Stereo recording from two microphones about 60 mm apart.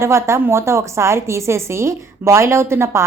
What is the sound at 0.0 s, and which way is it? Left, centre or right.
A woman's voice, right.